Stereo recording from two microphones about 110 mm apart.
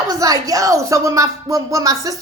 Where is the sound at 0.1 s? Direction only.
30° right (ahead or behind).